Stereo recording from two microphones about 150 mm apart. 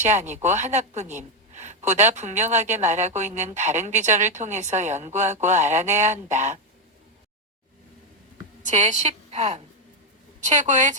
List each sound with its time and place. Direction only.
0.0 s a woman's voice: 50° right (ahead or behind)
8.6 s a woman's voice: 50° right (ahead or behind)